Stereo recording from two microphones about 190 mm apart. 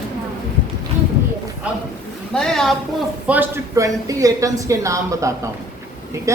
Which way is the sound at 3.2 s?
10° right (ahead or behind).